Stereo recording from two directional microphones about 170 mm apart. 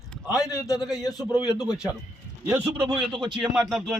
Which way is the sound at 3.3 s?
Centre (ahead or behind).